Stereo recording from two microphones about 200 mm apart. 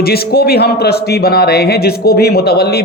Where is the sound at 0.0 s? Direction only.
50° left (ahead or behind).